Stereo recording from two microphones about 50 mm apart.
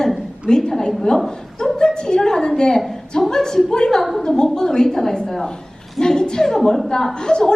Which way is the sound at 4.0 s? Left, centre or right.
Centre.